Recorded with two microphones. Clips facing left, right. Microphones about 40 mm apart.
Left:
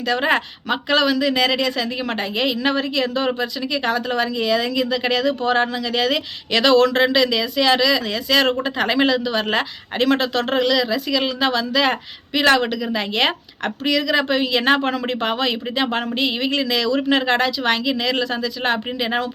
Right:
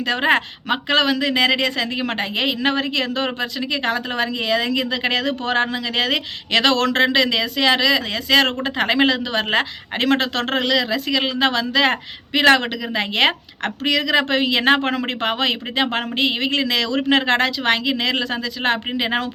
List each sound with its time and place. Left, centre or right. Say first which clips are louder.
0.1 s a woman's voice: right 1 dB; right